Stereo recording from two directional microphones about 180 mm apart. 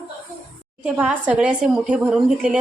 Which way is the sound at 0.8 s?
5° right (ahead or behind).